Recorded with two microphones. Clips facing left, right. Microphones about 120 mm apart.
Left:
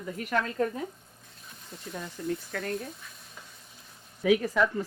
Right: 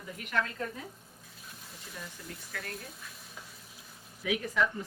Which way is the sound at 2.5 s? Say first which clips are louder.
Left 8 dB; 45° left (ahead or behind).